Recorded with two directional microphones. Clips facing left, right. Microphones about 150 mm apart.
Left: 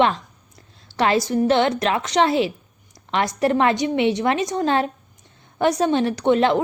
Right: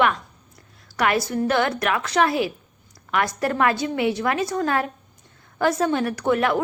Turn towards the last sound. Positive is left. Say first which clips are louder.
# left 3 dB
turn(degrees=25)  # may be behind; listen again after turning